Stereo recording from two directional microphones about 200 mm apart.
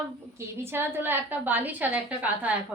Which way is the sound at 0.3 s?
10° right (ahead or behind).